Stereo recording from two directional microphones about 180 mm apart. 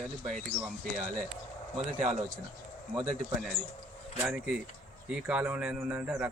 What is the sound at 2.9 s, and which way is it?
Speech, 15° right (ahead or behind).